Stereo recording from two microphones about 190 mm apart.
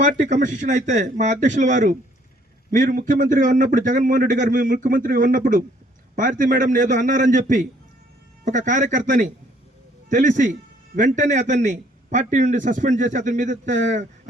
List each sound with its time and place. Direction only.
0.0 s a man's voice: 40° right (ahead or behind)